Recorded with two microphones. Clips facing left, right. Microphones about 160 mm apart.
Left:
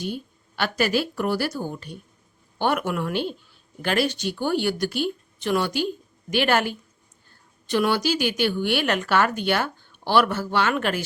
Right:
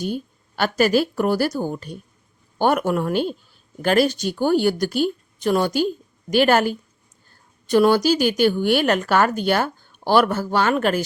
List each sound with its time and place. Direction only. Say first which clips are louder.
0.0 s a woman's voice: right 4 dB; 45° right (ahead or behind)